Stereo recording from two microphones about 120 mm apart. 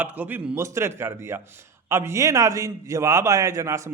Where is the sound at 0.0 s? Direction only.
15° right (ahead or behind).